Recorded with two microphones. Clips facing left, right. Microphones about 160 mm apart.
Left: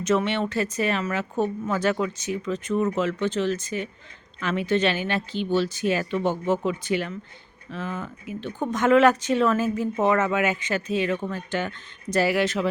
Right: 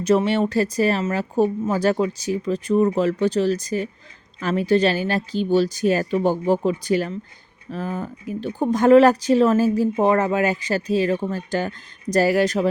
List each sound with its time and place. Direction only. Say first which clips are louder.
0.0 s speech: right 5 dB; 35° right (ahead or behind)